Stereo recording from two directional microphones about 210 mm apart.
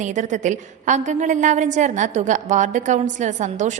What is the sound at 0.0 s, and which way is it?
A woman's voice, 35° right (ahead or behind).